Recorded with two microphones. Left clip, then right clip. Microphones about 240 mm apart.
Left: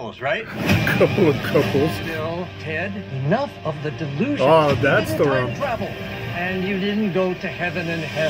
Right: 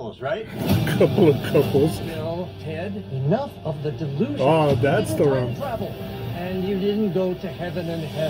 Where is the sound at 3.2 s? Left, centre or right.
Left.